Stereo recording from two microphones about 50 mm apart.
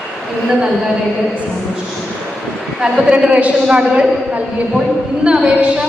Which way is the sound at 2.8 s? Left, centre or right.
Centre.